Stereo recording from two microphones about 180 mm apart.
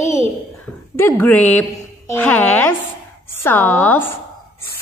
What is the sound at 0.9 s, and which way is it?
A woman's voice, 10° left (ahead or behind).